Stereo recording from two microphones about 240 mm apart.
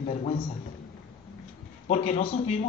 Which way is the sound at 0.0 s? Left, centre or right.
Left.